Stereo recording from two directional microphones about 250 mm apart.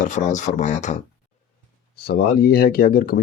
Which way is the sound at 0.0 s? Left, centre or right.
Left.